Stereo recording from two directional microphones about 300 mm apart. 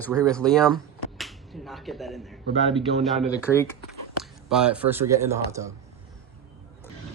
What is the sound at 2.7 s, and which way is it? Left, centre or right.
Speech, centre.